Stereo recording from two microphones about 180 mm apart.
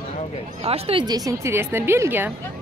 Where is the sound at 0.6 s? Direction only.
30° right (ahead or behind); by 2.3 s 10° right (ahead or behind).